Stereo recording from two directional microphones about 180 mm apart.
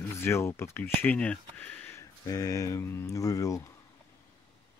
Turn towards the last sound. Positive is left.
turn(degrees=20)  # may be behind; listen again after turning